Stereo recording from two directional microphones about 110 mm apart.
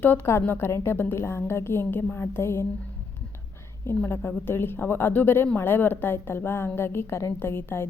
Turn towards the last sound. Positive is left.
turn(degrees=20)  # may be behind; listen again after turning